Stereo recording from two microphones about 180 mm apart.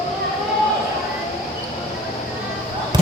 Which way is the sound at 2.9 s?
25° right (ahead or behind).